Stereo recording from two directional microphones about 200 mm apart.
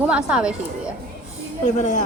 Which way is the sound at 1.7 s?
35° left (ahead or behind).